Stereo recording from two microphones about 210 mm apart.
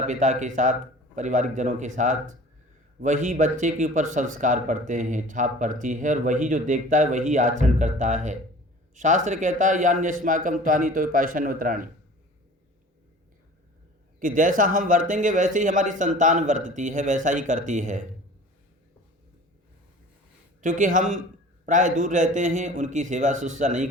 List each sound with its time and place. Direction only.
0.1 s speech: 35° right (ahead or behind)
14.2 s speech: 40° right (ahead or behind)
20.6 s speech: 35° right (ahead or behind)